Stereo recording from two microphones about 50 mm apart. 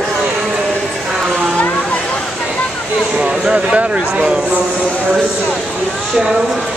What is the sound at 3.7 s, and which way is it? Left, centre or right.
Speech, right.